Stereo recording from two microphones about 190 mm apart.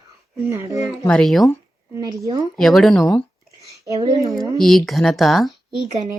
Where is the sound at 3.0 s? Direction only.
15° left (ahead or behind).